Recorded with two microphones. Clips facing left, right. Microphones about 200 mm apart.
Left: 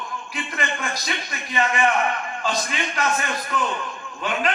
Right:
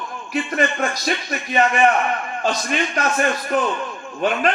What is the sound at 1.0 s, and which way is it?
A man's voice, 45° right (ahead or behind).